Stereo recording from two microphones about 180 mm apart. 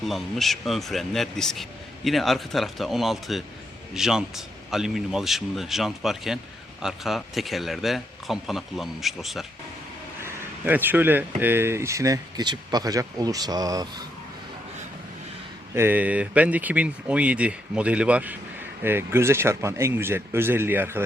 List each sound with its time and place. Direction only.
0.0 s a man's voice: centre (ahead or behind); by 14.0 s 20° right (ahead or behind)
15.7 s speech: 10° right (ahead or behind)